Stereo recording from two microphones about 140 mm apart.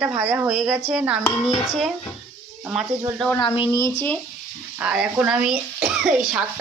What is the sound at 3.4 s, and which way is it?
Speech, 35° left (ahead or behind).